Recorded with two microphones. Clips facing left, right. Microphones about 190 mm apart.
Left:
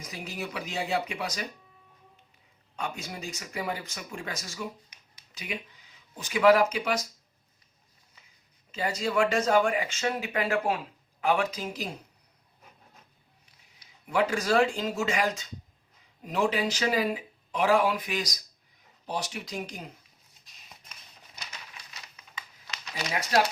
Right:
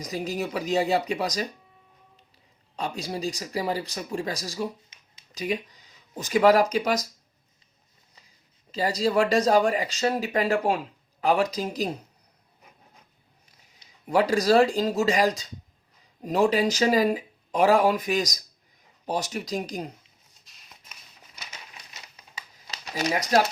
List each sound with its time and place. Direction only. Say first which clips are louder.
0.0 s speech: right 8 dB; 40° right (ahead or behind)
2.7 s speech: right 5 dB; 35° right (ahead or behind)
8.7 s speech: right 5 dB; 35° right (ahead or behind)
14.1 s speech: right 5 dB; 35° right (ahead or behind)
23.0 s speech: right 4 dB; 45° right (ahead or behind)